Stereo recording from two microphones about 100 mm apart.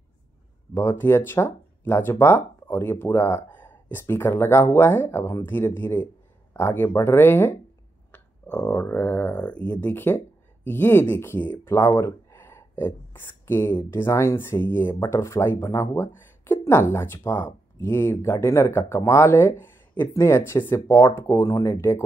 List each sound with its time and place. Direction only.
0.7 s speech: 25° left (ahead or behind)